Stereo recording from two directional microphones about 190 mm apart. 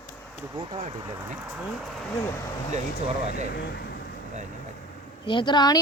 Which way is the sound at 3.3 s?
55° left (ahead or behind).